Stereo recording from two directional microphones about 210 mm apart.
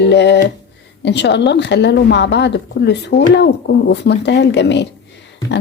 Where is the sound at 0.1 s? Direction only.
55° left (ahead or behind).